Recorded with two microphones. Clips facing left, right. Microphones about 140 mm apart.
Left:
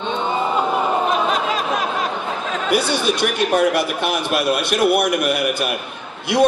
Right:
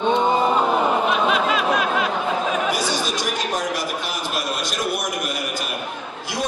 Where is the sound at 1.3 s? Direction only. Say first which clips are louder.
Right 1 dB; 40° left (ahead or behind).